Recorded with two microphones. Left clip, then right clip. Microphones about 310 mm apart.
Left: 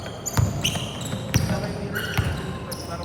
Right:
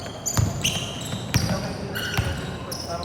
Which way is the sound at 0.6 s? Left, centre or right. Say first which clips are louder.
Right 1 dB; centre.